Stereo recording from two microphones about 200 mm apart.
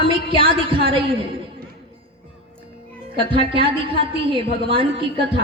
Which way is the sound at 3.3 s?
25° right (ahead or behind).